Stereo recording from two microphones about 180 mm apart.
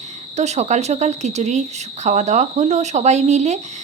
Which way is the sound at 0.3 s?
40° right (ahead or behind).